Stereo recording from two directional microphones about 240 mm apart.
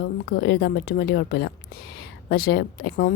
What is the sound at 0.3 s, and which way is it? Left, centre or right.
Speech, left.